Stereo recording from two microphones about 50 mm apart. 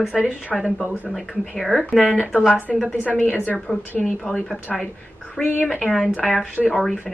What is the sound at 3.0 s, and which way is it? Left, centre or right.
Speech, left.